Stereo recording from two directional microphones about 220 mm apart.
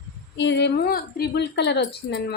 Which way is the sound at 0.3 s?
55° left (ahead or behind).